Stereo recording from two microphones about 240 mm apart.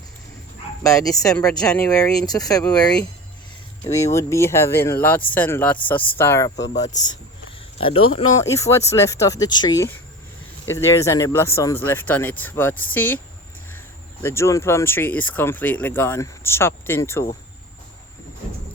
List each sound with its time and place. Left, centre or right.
0.8 s speech: centre
1.3 s speech: centre
2.2 s speech: centre
3.8 s speech: left
4.1 s speech: centre
8.4 s speech: centre